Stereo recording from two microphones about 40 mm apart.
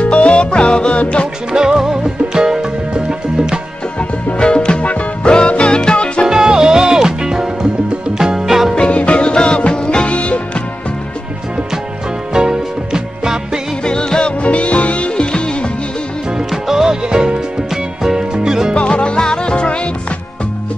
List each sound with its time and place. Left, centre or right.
0.1 s music: left
1.5 s music: centre
4.4 s music: left
6.2 s music: centre
8.7 s music: left
12.4 s music: centre
13.8 s music: centre
14.4 s music: left
16.6 s music: centre
17.1 s music: centre
18.8 s music: left